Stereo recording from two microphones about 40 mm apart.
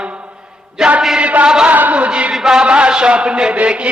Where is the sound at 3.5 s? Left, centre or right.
Right.